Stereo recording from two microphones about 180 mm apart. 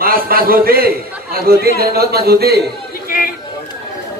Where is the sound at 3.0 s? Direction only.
55° left (ahead or behind).